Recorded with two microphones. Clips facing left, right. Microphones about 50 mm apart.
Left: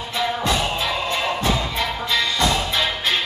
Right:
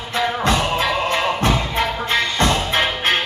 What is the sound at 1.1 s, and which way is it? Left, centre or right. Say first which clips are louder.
Music: right 3 dB; right.